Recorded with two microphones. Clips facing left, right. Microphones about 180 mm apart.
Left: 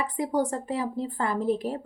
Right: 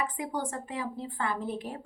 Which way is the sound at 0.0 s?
35° left (ahead or behind).